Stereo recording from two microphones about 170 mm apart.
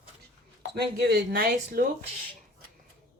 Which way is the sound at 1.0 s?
65° right (ahead or behind).